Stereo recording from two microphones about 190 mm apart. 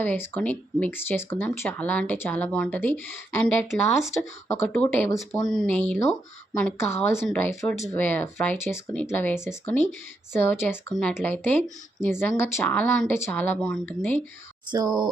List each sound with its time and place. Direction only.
0.0 s speech: 10° left (ahead or behind)
5.4 s speech: centre (ahead or behind)
6.7 s speech: 15° left (ahead or behind)
13.6 s speech: centre (ahead or behind)
14.7 s speech: 20° right (ahead or behind)